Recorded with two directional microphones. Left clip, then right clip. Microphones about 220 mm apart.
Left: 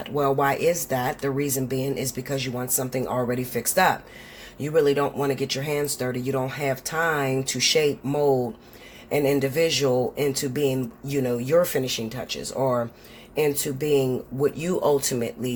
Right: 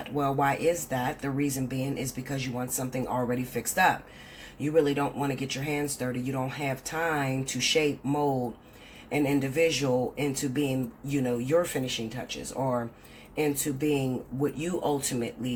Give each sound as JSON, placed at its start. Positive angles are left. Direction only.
{"t": 0.2, "sound": "speech", "side_deg": 45}